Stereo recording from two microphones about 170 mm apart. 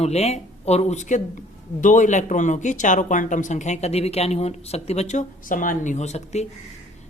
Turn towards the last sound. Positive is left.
turn(degrees=40)  # may be behind; listen again after turning